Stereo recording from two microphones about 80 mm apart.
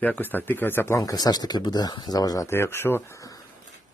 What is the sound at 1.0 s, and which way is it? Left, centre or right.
Speech, left.